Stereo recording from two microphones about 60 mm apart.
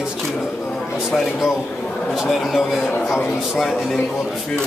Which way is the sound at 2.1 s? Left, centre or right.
Centre.